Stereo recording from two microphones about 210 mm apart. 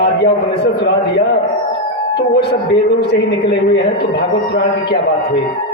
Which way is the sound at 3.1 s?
50° left (ahead or behind).